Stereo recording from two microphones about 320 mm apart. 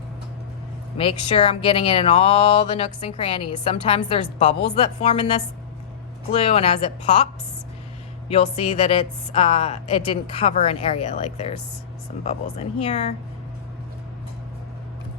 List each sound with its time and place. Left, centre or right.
0.9 s speech: centre
6.3 s a woman's voice: centre
8.3 s a woman's voice: centre